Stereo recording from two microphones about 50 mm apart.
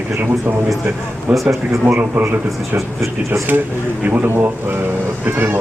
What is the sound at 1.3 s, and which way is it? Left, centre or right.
Speech, centre.